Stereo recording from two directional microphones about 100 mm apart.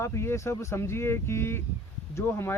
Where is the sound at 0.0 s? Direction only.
25° left (ahead or behind).